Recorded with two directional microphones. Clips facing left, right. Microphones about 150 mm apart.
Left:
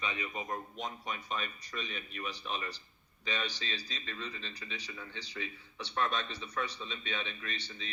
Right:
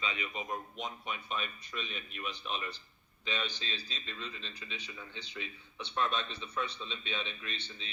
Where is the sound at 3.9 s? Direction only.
5° right (ahead or behind).